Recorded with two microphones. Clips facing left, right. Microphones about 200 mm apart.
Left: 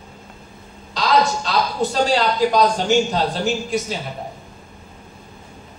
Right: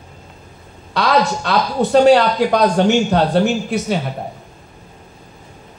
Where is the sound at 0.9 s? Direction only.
60° right (ahead or behind).